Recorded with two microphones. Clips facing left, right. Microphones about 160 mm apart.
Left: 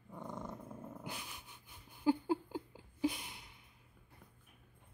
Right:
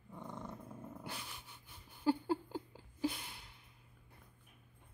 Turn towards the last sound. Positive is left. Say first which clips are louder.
# left 2 dB
turn(degrees=15)  # may be behind; listen again after turning